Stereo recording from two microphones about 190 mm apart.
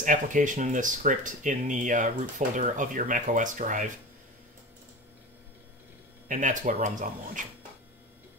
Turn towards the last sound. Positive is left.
turn(degrees=-40)  # may be behind; listen again after turning